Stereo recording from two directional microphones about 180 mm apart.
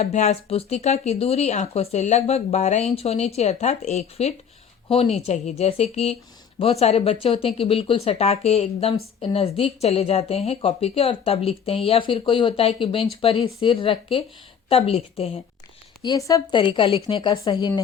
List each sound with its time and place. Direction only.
0.0 s speech: 35° left (ahead or behind)
16.0 s speech: 20° left (ahead or behind)